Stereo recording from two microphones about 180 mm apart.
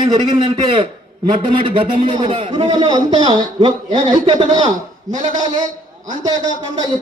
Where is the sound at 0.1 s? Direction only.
25° right (ahead or behind).